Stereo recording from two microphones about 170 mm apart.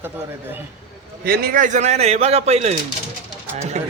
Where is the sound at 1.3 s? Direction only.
60° right (ahead or behind); by 2.7 s 40° right (ahead or behind).